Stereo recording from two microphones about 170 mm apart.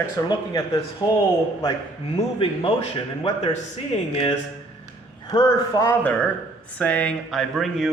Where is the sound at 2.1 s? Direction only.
35° left (ahead or behind).